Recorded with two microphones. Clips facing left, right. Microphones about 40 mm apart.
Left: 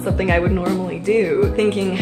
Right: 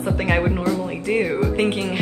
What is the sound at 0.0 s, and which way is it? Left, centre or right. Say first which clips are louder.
Speech: left 2 dB; centre.